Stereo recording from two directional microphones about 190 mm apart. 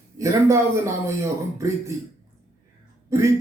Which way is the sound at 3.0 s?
15° right (ahead or behind).